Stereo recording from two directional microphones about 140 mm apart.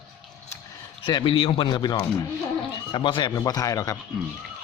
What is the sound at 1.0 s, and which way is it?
A man's voice, 35° left (ahead or behind).